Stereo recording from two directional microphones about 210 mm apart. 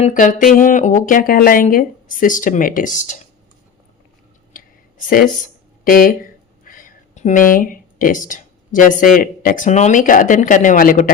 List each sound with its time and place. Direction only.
0.0 s speech: 40° left (ahead or behind)
5.0 s a sound: 40° left (ahead or behind)
7.5 s speech: 40° left (ahead or behind)